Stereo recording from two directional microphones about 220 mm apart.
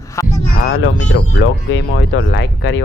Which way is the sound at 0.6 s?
55° left (ahead or behind).